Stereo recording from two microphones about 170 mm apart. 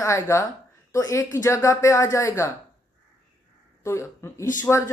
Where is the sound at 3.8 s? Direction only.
15° left (ahead or behind).